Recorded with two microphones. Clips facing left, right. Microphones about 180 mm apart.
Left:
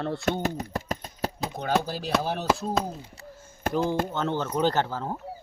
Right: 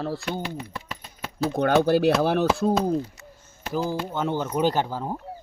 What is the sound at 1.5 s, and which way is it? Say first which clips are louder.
Speech: right 10 dB; 60° right (ahead or behind).